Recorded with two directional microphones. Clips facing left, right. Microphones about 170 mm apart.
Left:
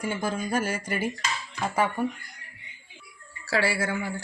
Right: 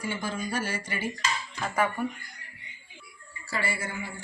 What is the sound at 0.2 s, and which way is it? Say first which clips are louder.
Speech: left 4 dB; 50° left (ahead or behind).